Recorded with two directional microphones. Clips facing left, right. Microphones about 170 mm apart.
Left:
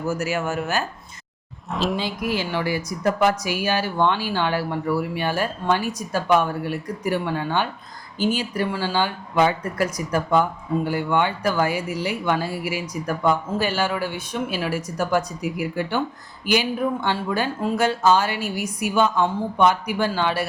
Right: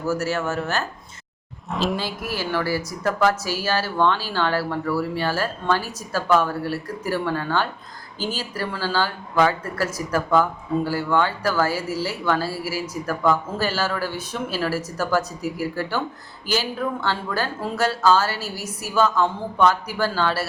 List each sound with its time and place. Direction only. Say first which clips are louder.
0.1 s a woman's voice: right 2 dB; 15° left (ahead or behind)
1.7 s speech: even; centre (ahead or behind)
2.0 s a woman's voice: left 2 dB; 15° left (ahead or behind)